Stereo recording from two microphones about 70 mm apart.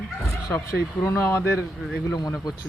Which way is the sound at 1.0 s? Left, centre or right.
Left.